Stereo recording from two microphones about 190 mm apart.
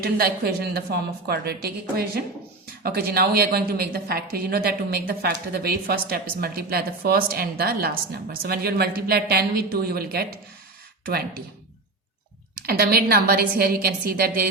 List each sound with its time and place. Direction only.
0.0 s a woman's voice: 55° right (ahead or behind)
12.6 s a woman's voice: 55° right (ahead or behind)